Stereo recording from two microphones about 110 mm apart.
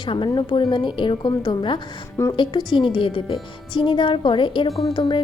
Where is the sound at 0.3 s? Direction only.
40° left (ahead or behind).